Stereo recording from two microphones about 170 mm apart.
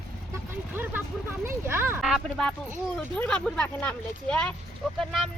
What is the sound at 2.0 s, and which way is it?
Speech, centre (ahead or behind).